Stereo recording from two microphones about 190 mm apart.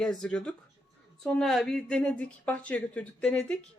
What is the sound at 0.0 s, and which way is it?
A woman's voice, 5° left (ahead or behind).